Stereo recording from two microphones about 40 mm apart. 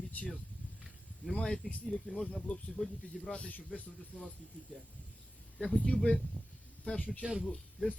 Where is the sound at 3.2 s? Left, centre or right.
Centre.